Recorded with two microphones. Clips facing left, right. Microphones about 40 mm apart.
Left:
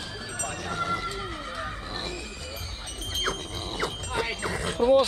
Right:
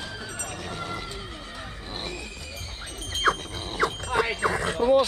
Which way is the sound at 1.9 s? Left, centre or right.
Right.